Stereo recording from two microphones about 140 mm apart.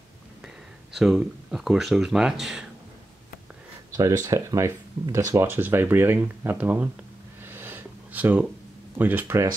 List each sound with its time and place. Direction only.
0.9 s speech: 5° right (ahead or behind)
3.9 s speech: 25° right (ahead or behind)
7.4 s a sound: 15° right (ahead or behind)
8.9 s speech: 15° right (ahead or behind)